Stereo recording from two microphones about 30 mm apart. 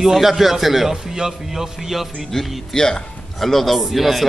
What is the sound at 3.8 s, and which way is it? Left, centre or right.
Speech, centre.